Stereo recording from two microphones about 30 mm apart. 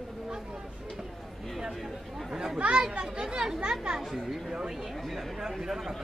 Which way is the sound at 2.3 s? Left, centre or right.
Centre.